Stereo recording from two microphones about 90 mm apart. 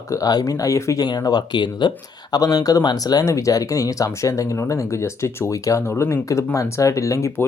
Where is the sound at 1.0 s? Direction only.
50° left (ahead or behind).